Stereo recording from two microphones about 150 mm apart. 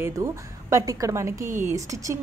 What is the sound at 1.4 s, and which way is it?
Speech, 60° right (ahead or behind).